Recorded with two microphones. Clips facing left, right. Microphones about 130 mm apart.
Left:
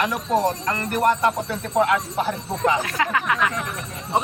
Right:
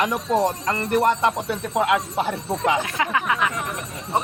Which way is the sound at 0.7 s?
25° right (ahead or behind).